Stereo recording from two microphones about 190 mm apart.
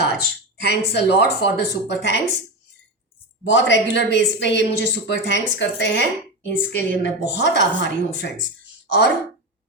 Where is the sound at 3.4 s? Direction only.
70° left (ahead or behind).